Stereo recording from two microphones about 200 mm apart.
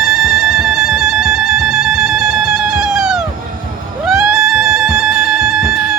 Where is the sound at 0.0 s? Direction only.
Centre (ahead or behind).